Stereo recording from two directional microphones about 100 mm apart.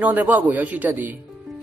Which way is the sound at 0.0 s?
20° right (ahead or behind).